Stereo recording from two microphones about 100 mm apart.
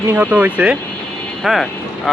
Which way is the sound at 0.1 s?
15° right (ahead or behind).